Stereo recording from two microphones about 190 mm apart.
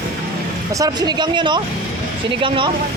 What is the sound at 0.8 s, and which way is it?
Speech, 20° right (ahead or behind).